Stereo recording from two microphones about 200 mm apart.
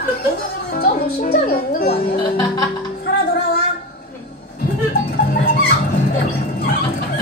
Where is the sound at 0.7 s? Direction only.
45° left (ahead or behind).